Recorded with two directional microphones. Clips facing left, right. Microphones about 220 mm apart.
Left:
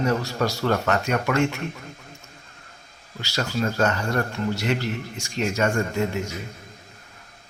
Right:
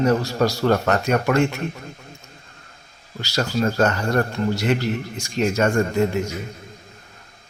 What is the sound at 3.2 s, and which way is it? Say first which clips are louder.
A man's voice: right 4 dB; 40° right (ahead or behind).